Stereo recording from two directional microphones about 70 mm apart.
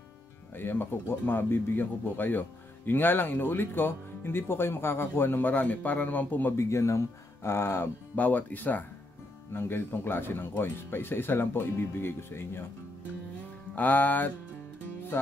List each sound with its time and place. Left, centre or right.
0.6 s speech: left
6.5 s speech: left
8.2 s speech: left
13.7 s speech: left